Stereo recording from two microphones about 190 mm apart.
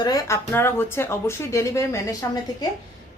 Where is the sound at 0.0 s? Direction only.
20° left (ahead or behind).